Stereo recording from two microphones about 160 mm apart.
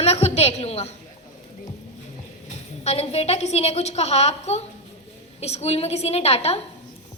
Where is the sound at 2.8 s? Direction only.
40° left (ahead or behind).